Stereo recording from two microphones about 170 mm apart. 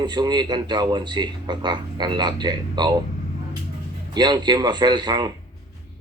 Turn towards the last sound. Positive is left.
turn(degrees=-25)  # may be behind; listen again after turning